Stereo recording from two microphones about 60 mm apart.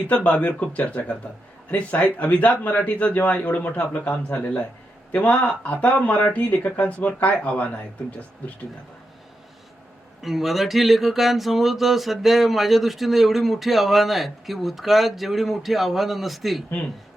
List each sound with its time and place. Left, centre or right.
0.1 s speech: left
10.2 s speech: centre